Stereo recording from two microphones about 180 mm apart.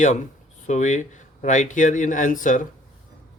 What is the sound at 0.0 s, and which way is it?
Speech, 40° left (ahead or behind).